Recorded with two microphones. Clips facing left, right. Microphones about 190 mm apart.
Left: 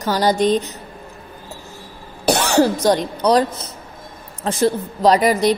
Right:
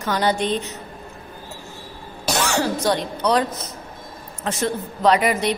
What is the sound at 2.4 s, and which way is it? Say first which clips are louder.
A woman's voice: left 4 dB; 35° left (ahead or behind).